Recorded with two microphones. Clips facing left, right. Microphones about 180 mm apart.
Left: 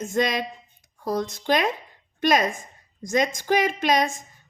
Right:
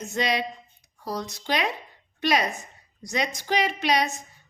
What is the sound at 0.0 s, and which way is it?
A woman's voice, 50° left (ahead or behind).